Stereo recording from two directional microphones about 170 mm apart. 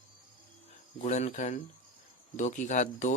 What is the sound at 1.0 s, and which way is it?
Speech, 40° left (ahead or behind).